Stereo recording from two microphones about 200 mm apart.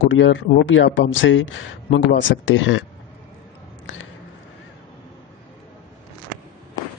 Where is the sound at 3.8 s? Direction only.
80° left.